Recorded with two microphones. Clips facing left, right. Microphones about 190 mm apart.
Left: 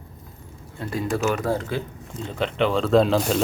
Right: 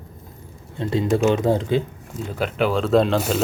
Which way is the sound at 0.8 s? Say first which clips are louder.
Right 5 dB; 25° right (ahead or behind).